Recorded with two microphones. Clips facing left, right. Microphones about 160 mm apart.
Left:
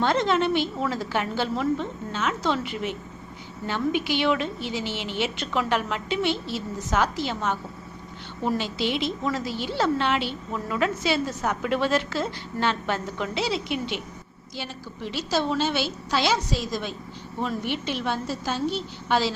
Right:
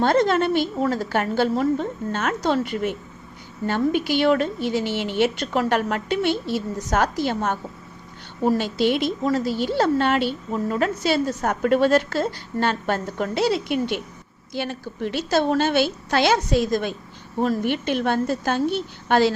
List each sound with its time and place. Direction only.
0.0 s a woman's voice: 45° right (ahead or behind)